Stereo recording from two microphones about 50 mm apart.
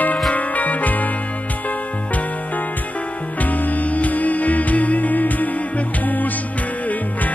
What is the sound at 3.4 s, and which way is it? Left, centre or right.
Music, left.